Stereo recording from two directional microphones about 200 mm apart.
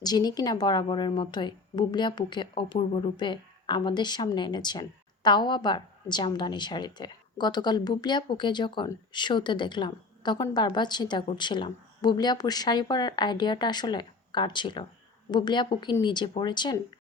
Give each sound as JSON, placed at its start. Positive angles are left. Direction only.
{"t": 0.0, "sound": "a woman's voice", "side_deg": 20}